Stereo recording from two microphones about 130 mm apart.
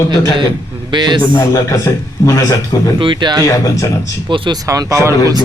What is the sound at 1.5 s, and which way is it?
A man's voice, 25° left (ahead or behind).